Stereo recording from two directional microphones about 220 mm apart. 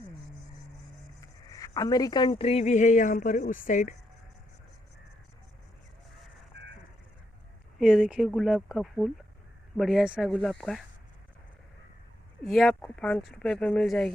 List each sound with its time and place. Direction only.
1.5 s speech: 15° left (ahead or behind); by 3.9 s 35° left (ahead or behind)
6.1 s a sound: centre (ahead or behind)
7.8 s speech: centre (ahead or behind)
12.4 s speech: centre (ahead or behind)